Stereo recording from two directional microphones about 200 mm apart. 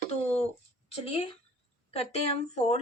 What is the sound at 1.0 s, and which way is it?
A woman's voice, 30° left (ahead or behind).